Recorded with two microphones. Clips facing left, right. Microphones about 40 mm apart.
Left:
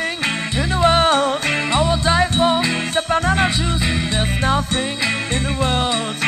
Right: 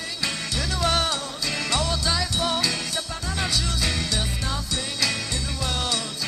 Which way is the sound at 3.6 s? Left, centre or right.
Left.